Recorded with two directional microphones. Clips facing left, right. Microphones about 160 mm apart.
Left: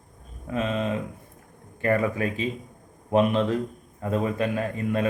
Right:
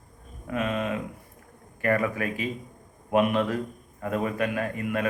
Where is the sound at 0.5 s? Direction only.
25° left (ahead or behind).